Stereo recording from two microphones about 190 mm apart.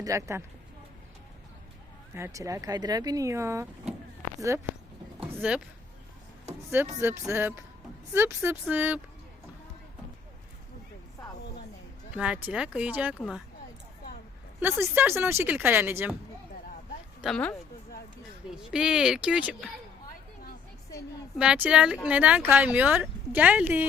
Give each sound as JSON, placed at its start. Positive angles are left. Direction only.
{"t": 0.0, "sound": "speech", "side_deg": -15}
{"t": 2.1, "sound": "speech", "side_deg": -15}
{"t": 5.2, "sound": "a sound", "side_deg": -5}
{"t": 7.0, "sound": "speech", "side_deg": -15}
{"t": 12.1, "sound": "speech", "side_deg": -5}
{"t": 14.6, "sound": "speech", "side_deg": -10}
{"t": 17.2, "sound": "a woman's voice", "side_deg": 0}
{"t": 18.5, "sound": "speech", "side_deg": -5}
{"t": 21.3, "sound": "speech", "side_deg": -5}